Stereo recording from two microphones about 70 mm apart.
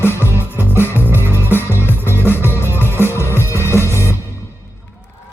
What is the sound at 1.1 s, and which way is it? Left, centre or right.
Music, right.